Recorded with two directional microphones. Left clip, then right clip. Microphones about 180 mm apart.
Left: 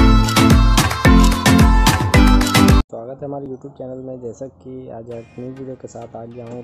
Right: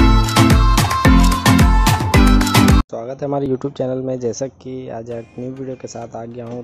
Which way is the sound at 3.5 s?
25° right (ahead or behind).